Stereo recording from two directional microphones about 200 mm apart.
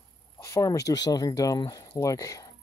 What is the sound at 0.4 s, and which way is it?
Speech, 15° left (ahead or behind).